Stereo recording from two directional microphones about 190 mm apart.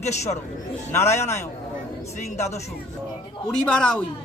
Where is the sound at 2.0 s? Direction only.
35° left (ahead or behind).